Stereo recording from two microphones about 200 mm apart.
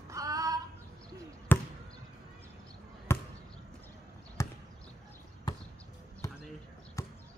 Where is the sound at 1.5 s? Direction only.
10° left (ahead or behind).